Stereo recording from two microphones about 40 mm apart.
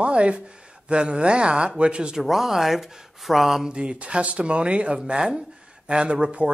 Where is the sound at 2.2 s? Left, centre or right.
Centre.